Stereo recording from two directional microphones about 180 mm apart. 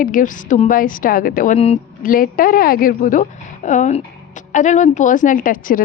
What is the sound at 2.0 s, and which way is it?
A woman's voice, 50° left (ahead or behind).